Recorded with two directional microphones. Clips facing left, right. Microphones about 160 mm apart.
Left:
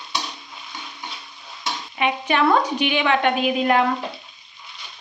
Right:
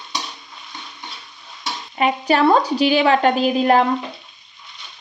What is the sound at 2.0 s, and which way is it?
Speech, 40° right (ahead or behind).